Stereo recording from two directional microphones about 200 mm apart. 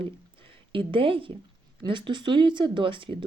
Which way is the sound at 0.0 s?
25° right (ahead or behind).